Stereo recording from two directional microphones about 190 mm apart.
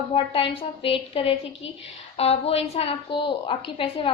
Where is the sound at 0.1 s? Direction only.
30° left (ahead or behind).